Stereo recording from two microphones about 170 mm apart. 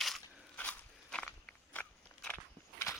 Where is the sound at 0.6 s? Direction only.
5° left (ahead or behind).